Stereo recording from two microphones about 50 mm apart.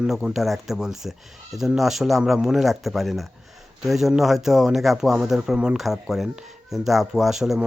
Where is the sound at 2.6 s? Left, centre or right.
Centre.